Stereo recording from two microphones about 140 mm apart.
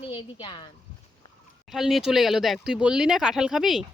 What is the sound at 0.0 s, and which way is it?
Speech, 40° left (ahead or behind).